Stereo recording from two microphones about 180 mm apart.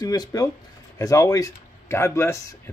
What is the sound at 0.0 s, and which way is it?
Speech, 20° left (ahead or behind).